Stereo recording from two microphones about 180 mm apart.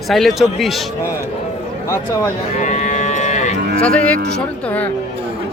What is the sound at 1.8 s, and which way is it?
Speech, 15° left (ahead or behind).